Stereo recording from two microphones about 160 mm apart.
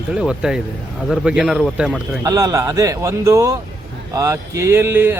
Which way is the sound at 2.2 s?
20° right (ahead or behind).